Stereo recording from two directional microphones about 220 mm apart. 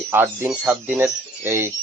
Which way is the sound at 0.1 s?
10° right (ahead or behind).